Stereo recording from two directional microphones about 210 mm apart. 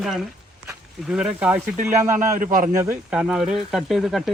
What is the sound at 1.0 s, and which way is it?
Speech, 5° right (ahead or behind).